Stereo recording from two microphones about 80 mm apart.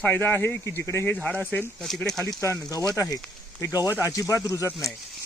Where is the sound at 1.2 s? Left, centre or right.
Centre.